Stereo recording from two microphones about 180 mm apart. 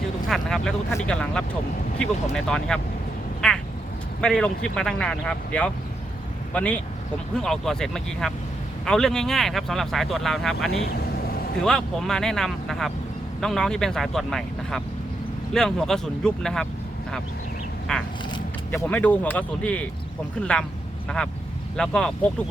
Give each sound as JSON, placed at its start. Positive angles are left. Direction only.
{"t": 0.3, "sound": "a sound", "side_deg": 0}
{"t": 1.0, "sound": "speech", "side_deg": 5}
{"t": 3.4, "sound": "a sound", "side_deg": 5}
{"t": 4.2, "sound": "speech", "side_deg": 5}
{"t": 10.8, "sound": "vehicle", "side_deg": 60}
{"t": 11.6, "sound": "speech", "side_deg": 5}
{"t": 17.9, "sound": "speech", "side_deg": 5}
{"t": 21.8, "sound": "speech", "side_deg": 5}